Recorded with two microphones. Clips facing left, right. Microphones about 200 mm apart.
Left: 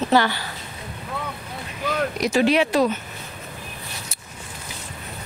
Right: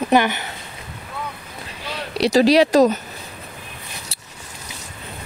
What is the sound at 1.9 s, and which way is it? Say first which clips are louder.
Speech: right 2 dB; 30° right (ahead or behind).